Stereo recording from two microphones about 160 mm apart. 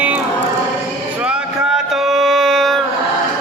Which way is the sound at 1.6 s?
Centre (ahead or behind).